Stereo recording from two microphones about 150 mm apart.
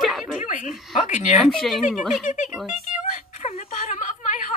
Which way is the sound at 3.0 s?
50° left (ahead or behind).